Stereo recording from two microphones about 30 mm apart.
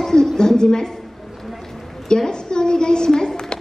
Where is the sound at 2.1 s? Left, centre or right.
Left.